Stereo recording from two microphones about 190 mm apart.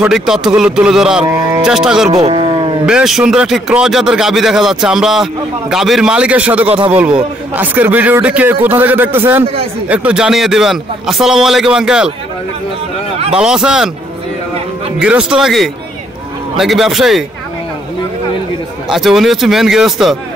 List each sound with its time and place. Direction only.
0.0 s speech: 5° right (ahead or behind)
2.2 s a sound: 25° right (ahead or behind)
2.9 s a man's voice: 5° right (ahead or behind)
13.3 s speech: 5° right (ahead or behind)
15.0 s speech: 5° right (ahead or behind)
18.9 s speech: centre (ahead or behind)